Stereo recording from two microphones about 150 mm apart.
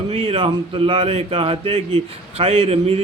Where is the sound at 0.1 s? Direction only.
40° right (ahead or behind).